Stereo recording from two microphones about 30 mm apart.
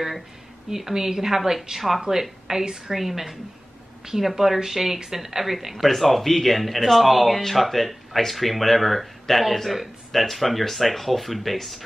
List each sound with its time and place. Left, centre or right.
0.7 s a woman's voice: centre
2.7 s speech: centre